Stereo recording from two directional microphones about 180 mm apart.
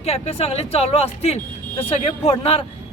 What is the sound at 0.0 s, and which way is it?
Speech, 35° left (ahead or behind).